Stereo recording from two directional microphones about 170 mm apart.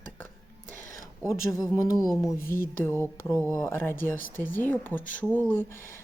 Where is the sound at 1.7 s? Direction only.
20° left (ahead or behind).